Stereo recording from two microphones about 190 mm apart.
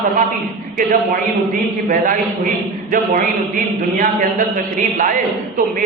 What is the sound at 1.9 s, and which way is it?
A man's voice, 45° right (ahead or behind).